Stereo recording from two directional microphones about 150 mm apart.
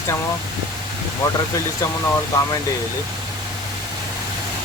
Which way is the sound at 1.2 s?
20° left (ahead or behind).